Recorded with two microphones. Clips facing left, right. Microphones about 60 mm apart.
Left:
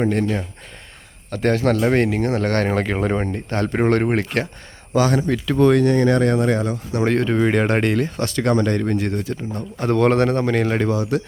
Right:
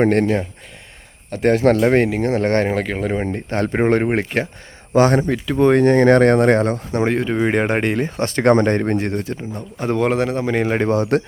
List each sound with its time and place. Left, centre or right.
0.0 s speech: right
1.3 s speech: right
2.6 s speech: centre
3.2 s speech: right
4.9 s speech: right
5.5 s speech: right
5.8 s speech: right
7.1 s speech: centre; by 9.5 s right
9.6 s a man's voice: centre
10.8 s speech: right